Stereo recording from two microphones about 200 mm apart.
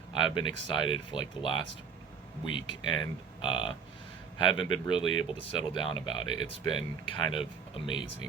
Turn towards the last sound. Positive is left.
turn(degrees=25)  # may be behind; listen again after turning